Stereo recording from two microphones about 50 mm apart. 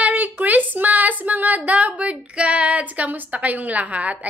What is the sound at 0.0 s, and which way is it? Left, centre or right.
Speech, right.